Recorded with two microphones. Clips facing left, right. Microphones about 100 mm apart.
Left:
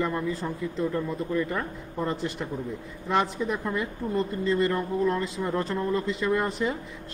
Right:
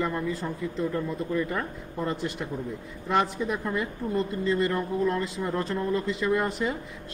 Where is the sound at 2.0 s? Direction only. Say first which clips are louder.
Left 1 dB; 35° left (ahead or behind).